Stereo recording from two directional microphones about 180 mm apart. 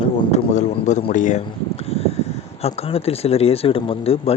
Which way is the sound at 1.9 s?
35° left (ahead or behind).